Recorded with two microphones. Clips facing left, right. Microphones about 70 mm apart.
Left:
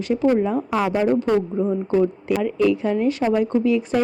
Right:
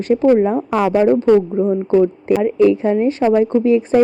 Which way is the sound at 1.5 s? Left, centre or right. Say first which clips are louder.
Right 5 dB; centre.